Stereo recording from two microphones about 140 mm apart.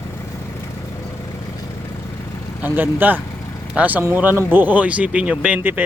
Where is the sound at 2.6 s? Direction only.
15° right (ahead or behind).